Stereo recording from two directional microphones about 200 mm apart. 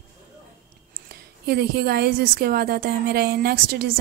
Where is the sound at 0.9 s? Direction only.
50° right (ahead or behind).